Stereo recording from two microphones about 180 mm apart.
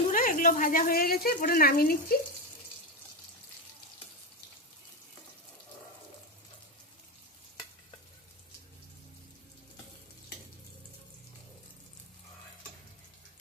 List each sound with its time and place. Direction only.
0.1 s speech: 50° left (ahead or behind)